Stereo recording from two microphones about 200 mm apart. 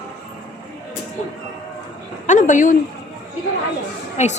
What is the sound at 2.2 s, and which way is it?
Speech, 40° left (ahead or behind).